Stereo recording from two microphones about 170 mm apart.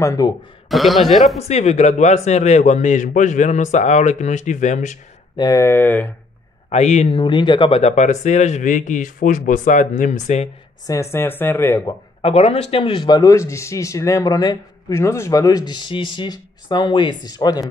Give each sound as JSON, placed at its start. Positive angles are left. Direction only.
{"t": 0.0, "sound": "speech", "side_deg": 20}
{"t": 0.7, "sound": "a man's voice", "side_deg": 0}
{"t": 1.5, "sound": "speech", "side_deg": 40}
{"t": 5.4, "sound": "speech", "side_deg": 20}
{"t": 6.7, "sound": "speech", "side_deg": 40}
{"t": 10.9, "sound": "speech", "side_deg": 15}
{"t": 11.8, "sound": "speech", "side_deg": 35}